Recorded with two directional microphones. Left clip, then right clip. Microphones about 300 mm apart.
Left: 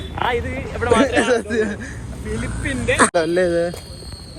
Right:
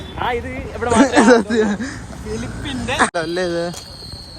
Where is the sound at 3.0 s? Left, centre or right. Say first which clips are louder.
Left 2 dB; centre.